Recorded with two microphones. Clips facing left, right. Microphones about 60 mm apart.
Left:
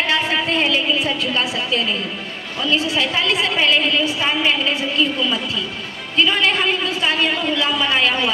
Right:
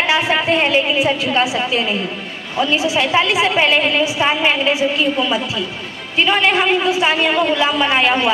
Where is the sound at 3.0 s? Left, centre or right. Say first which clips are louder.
Right 4 dB; right.